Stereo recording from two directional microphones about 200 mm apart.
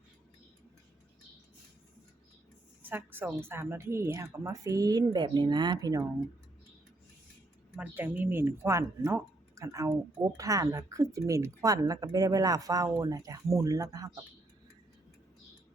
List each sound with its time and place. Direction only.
2.8 s speech: 10° right (ahead or behind)
7.8 s speech: 10° right (ahead or behind)